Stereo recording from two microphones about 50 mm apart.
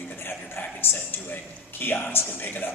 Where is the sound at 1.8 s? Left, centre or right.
Left.